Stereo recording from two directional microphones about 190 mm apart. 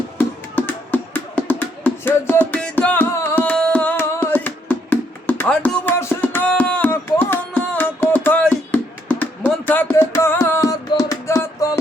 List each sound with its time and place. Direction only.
0.2 s music: 10° left (ahead or behind)